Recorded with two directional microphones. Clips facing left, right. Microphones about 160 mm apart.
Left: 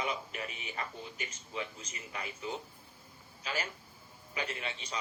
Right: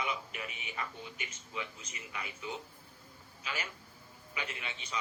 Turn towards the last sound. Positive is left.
turn(degrees=35)  # may be behind; listen again after turning